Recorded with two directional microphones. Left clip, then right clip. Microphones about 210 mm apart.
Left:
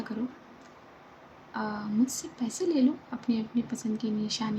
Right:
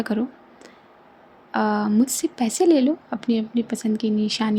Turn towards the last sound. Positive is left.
turn(degrees=-45)  # may be behind; listen again after turning